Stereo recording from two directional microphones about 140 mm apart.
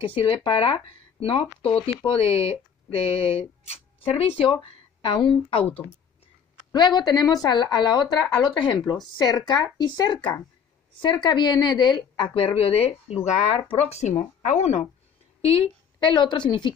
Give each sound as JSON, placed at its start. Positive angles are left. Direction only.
{"t": 0.0, "sound": "speech", "side_deg": 40}
{"t": 7.0, "sound": "a woman's voice", "side_deg": 30}
{"t": 15.4, "sound": "speech", "side_deg": 40}